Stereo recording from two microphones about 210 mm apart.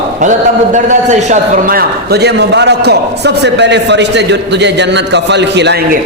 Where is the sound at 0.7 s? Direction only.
35° right (ahead or behind); by 5.8 s 55° right (ahead or behind).